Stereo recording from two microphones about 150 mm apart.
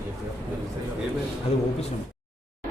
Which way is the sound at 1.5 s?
40° left (ahead or behind).